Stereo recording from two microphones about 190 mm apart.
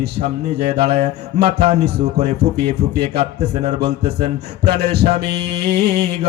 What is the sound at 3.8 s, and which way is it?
Music, 60° right (ahead or behind).